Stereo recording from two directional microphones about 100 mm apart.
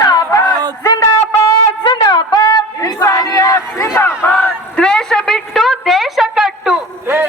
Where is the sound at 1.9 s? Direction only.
50° left (ahead or behind); by 4.2 s 25° left (ahead or behind).